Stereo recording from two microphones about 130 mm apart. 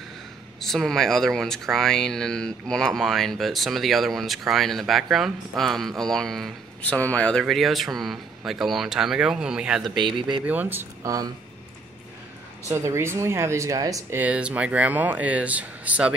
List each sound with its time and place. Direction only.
0.7 s speech: 5° left (ahead or behind)
9.8 s speech: 35° right (ahead or behind)
10.4 s speech: 10° right (ahead or behind)
11.1 s speech: 30° right (ahead or behind)
12.6 s speech: 20° right (ahead or behind)
14.1 s speech: 10° right (ahead or behind)